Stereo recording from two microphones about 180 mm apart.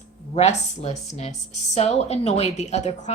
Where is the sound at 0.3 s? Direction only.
35° left (ahead or behind).